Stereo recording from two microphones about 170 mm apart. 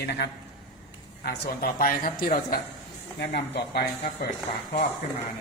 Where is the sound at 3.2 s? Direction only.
85° left.